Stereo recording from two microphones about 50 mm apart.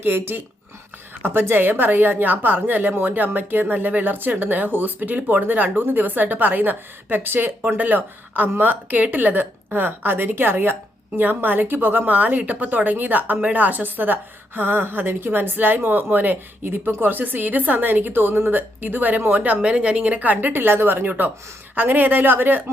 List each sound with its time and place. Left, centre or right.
0.0 s a woman's voice: right
7.8 s a woman's voice: right